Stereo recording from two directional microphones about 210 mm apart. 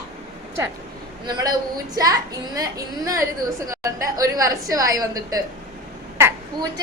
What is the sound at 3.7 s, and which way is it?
A woman's voice, 15° right (ahead or behind).